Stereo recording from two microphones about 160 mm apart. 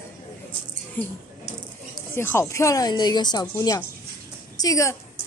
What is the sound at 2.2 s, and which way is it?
A woman's voice, 15° left (ahead or behind).